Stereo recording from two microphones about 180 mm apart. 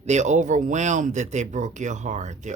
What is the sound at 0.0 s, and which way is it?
Speech, 40° right (ahead or behind).